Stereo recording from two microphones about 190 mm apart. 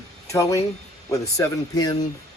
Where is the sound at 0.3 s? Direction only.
15° left (ahead or behind).